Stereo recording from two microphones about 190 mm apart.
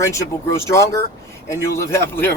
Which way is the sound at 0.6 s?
15° left (ahead or behind).